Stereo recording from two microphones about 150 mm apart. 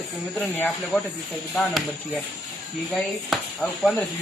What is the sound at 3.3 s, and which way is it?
Speech, centre (ahead or behind).